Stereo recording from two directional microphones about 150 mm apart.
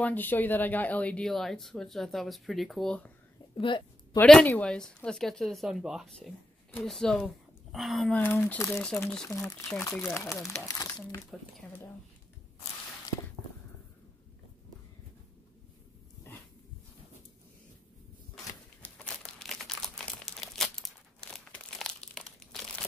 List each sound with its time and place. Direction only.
0.0 s speech: 10° left (ahead or behind)
3.5 s a sound: 35° left (ahead or behind)
4.2 s speech: 10° left (ahead or behind)
8.2 s speech: 15° left (ahead or behind)
8.6 s speech: centre (ahead or behind)
9.9 s speech: 20° left (ahead or behind)
11.3 s speech: centre (ahead or behind)
16.3 s a sound: 15° left (ahead or behind)
18.8 s crumpling: 10° left (ahead or behind)